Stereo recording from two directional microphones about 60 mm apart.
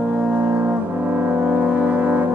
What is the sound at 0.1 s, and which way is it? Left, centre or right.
Brass instrument, right.